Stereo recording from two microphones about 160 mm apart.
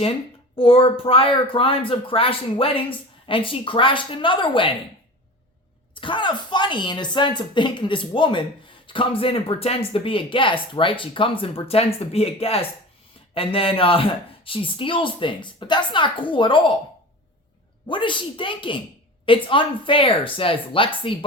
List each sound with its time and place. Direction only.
0.5 s speech: 35° left (ahead or behind)
5.9 s speech: 30° left (ahead or behind)
17.8 s speech: 30° left (ahead or behind)